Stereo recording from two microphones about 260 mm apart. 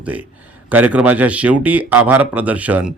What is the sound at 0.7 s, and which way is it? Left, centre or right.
A man's voice, centre.